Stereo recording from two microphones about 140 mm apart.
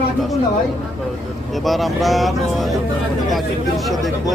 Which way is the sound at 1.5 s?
Centre (ahead or behind).